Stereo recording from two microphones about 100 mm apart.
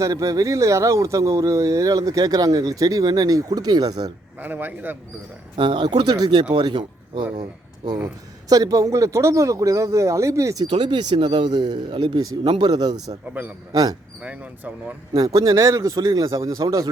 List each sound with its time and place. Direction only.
0.0 s speech: 35° right (ahead or behind)
4.4 s speech: 20° right (ahead or behind)
5.5 s speech: 50° right (ahead or behind)
8.0 s speech: 35° right (ahead or behind)
10.7 s speech: 50° right (ahead or behind)
13.4 s speech: 20° right (ahead or behind)
15.2 s speech: 35° right (ahead or behind)